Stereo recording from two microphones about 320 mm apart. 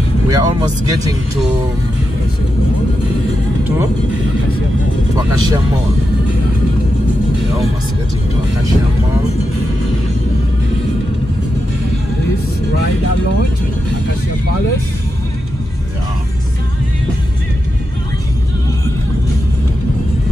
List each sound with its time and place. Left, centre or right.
0.3 s speech: centre